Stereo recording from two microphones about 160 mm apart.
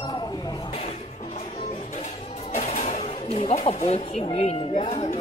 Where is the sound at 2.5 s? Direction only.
50° left (ahead or behind).